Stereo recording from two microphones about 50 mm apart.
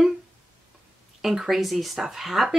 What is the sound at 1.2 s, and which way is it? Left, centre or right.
Speech, centre.